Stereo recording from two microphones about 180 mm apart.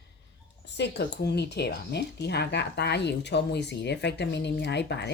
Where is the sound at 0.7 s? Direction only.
70° left (ahead or behind).